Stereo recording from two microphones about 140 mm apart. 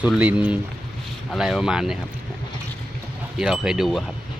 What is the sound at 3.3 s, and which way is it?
Speech, 5° right (ahead or behind).